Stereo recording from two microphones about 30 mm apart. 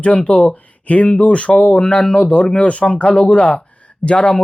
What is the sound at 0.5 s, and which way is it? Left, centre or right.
Speech, left.